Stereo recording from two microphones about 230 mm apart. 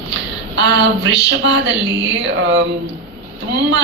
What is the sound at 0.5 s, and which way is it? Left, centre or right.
A woman's voice, right.